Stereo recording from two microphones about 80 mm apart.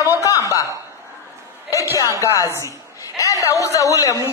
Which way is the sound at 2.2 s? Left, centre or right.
Left.